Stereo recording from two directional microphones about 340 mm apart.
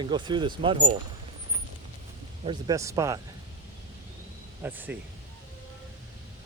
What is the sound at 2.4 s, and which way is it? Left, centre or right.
Speech, centre.